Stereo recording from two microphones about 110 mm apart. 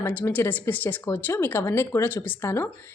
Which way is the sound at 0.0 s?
20° left (ahead or behind).